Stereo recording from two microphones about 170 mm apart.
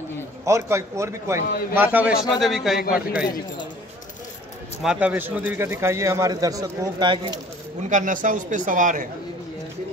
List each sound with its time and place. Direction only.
0.5 s a man's voice: 15° right (ahead or behind)
2.8 s speech: 60° left (ahead or behind)
4.8 s speech: 5° right (ahead or behind); by 7.3 s 25° right (ahead or behind)
7.9 s speech: 50° right (ahead or behind)